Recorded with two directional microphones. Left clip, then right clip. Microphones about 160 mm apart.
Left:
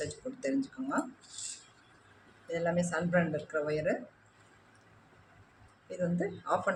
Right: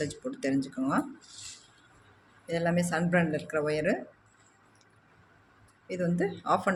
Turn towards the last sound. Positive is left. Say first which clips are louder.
# right 4 dB
turn(degrees=-55)  # may be behind; listen again after turning